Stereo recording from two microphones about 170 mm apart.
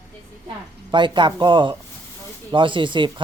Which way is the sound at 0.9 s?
25° right (ahead or behind).